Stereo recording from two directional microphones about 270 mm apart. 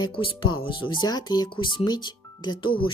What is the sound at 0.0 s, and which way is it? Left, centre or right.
Speech, centre.